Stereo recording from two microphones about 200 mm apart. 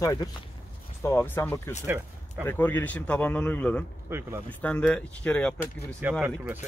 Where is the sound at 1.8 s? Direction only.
10° right (ahead or behind).